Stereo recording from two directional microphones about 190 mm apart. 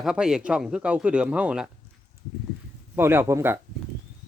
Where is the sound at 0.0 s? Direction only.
5° right (ahead or behind).